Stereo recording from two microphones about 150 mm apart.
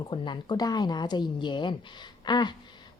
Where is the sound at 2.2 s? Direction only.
30° left (ahead or behind).